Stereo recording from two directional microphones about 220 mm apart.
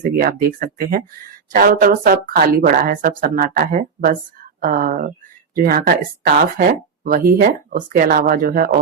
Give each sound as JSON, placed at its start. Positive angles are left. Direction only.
{"t": 0.0, "sound": "speech", "side_deg": -40}